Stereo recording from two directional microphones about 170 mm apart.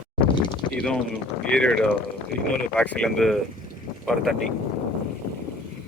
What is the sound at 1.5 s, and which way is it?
Speech, 5° left (ahead or behind).